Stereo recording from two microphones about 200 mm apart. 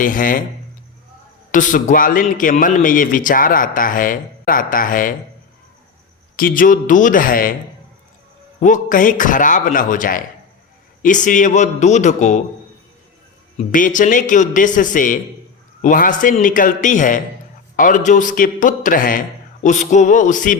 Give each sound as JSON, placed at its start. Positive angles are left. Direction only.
{"t": 0.0, "sound": "a man's voice", "side_deg": 40}
{"t": 1.5, "sound": "a man's voice", "side_deg": 40}
{"t": 6.3, "sound": "a man's voice", "side_deg": 45}
{"t": 8.6, "sound": "a man's voice", "side_deg": 40}
{"t": 13.6, "sound": "a man's voice", "side_deg": 40}